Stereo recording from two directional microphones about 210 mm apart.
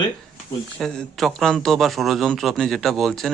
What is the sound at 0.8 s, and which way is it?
A man's voice, centre (ahead or behind).